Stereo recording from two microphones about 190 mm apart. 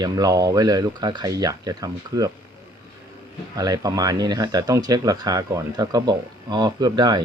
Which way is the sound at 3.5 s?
20° right (ahead or behind).